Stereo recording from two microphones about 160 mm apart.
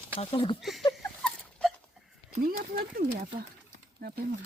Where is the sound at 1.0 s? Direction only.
Centre (ahead or behind).